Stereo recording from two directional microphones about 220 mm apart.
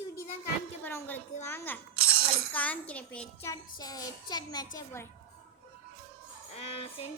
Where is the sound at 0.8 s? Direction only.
10° left (ahead or behind).